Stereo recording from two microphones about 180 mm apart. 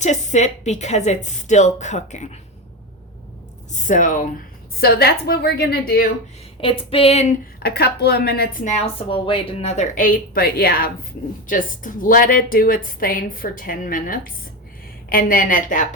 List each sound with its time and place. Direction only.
0.0 s speech: 40° left (ahead or behind)
3.7 s a woman's voice: 45° left (ahead or behind)
4.8 s a woman's voice: 60° left (ahead or behind)
6.6 s speech: 30° left (ahead or behind)
7.6 s a woman's voice: 60° left (ahead or behind); by 8.8 s 45° left (ahead or behind)
9.0 s a woman's voice: 30° left (ahead or behind); by 15.9 s 45° left (ahead or behind)